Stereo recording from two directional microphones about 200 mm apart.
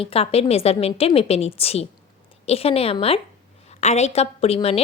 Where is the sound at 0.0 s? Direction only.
30° left (ahead or behind).